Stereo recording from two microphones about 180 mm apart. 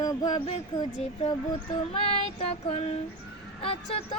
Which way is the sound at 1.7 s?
30° left (ahead or behind).